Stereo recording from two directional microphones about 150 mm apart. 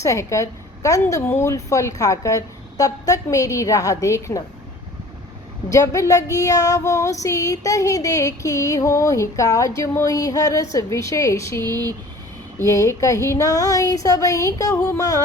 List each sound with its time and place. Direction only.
0.0 s child singing: 20° left (ahead or behind)
5.7 s child singing: 20° left (ahead or behind)